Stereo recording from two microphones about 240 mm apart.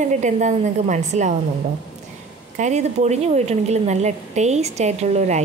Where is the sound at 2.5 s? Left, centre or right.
Right.